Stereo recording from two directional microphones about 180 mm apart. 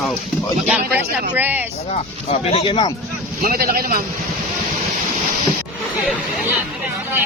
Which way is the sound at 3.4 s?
55° right (ahead or behind).